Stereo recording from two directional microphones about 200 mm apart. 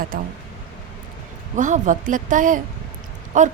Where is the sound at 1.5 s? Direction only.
40° right (ahead or behind).